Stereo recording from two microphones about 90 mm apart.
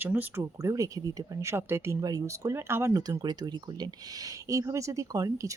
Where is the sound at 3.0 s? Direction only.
50° right (ahead or behind).